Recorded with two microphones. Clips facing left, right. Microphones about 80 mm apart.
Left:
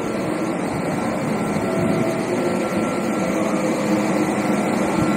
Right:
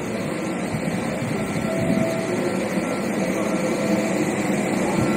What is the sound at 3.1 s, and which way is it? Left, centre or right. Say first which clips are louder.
Vehicle: left 2 dB; centre.